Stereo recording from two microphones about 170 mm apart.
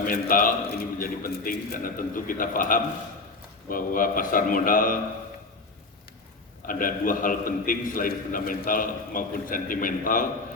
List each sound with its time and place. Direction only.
0.0 s a man's voice: 55° left (ahead or behind)
6.7 s a man's voice: 55° left (ahead or behind)